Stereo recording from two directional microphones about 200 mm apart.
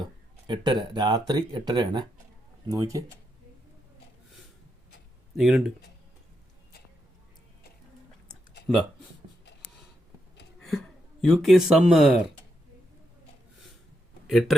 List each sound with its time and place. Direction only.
0.0 s speech: 20° right (ahead or behind)
5.4 s speech: centre (ahead or behind)
10.7 s speech: centre (ahead or behind)
14.3 s speech: centre (ahead or behind)